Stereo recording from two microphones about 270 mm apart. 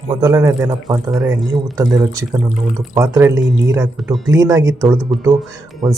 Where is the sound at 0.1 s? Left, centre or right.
Centre.